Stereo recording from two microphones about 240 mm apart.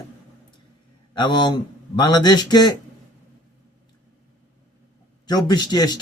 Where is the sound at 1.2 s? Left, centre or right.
Centre.